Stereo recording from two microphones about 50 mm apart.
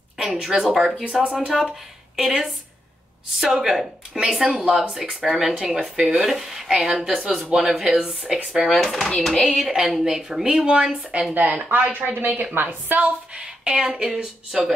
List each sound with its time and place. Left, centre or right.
0.2 s speech: centre
8.7 s speech: centre
9.7 s speech: centre
11.7 s a woman's voice: right
13.3 s speech: centre